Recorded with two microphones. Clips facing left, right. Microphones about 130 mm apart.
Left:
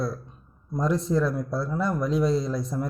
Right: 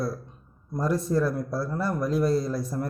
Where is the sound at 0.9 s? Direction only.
50° right (ahead or behind).